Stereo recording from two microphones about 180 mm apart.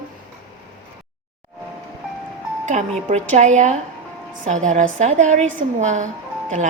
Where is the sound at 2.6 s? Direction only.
40° right (ahead or behind).